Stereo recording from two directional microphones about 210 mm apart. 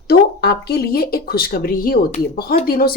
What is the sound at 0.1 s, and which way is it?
Speech, 50° left (ahead or behind).